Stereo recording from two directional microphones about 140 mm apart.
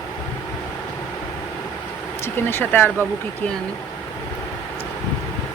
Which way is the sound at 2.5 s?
15° left (ahead or behind).